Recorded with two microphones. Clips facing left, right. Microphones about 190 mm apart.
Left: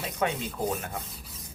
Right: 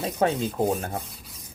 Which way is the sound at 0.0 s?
35° right (ahead or behind).